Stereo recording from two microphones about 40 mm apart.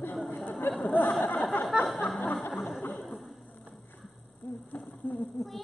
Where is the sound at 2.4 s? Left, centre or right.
Left.